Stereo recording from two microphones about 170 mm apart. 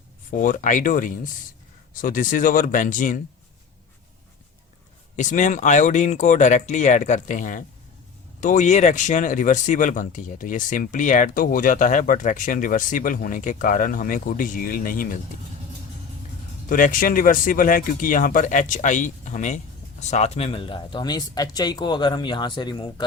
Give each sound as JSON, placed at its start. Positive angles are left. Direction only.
{"t": 0.3, "sound": "speech", "side_deg": 50}
{"t": 5.1, "sound": "speech", "side_deg": 50}
{"t": 16.6, "sound": "speech", "side_deg": 55}